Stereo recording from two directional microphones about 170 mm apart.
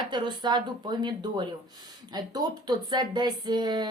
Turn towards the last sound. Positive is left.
turn(degrees=-25)  # may be behind; listen again after turning